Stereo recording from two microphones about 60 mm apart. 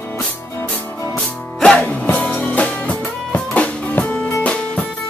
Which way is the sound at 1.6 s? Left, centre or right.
Centre.